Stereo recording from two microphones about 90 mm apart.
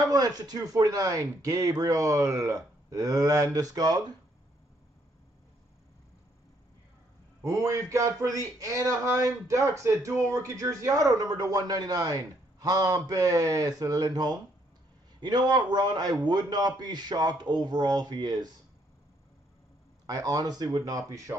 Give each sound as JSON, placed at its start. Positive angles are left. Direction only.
{"t": 0.1, "sound": "a man's voice", "side_deg": -45}
{"t": 7.4, "sound": "a man's voice", "side_deg": -40}
{"t": 20.1, "sound": "speech", "side_deg": -40}